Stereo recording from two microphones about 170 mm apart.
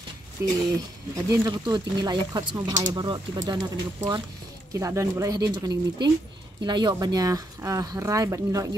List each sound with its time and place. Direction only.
0.4 s speech: 15° right (ahead or behind)